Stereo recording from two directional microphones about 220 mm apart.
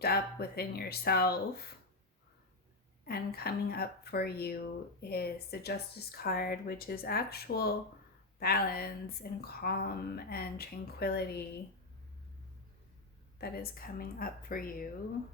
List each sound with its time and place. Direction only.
0.0 s a woman's voice: 45° left (ahead or behind)
3.1 s a woman's voice: 45° left (ahead or behind)
13.4 s a woman's voice: 40° left (ahead or behind)